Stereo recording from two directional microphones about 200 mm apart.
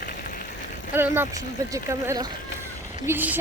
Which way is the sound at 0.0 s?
45° left (ahead or behind).